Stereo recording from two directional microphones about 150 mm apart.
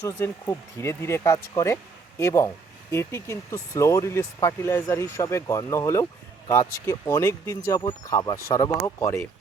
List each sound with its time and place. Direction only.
0.0 s speech: 15° left (ahead or behind)